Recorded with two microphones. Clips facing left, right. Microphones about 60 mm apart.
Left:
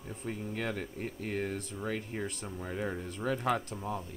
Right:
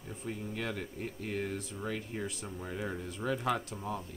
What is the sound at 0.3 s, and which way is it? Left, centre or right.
Speech, centre.